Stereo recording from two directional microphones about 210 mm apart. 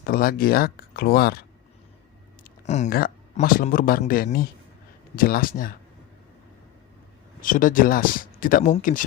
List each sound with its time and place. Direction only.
0.0 s speech: 45° left (ahead or behind)
2.4 s speech: 35° left (ahead or behind)
7.4 s speech: 40° left (ahead or behind)